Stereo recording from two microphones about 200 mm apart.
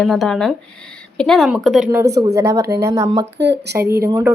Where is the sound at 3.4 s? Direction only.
55° right (ahead or behind).